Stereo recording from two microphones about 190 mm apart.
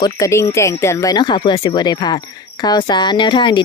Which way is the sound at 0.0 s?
15° left (ahead or behind).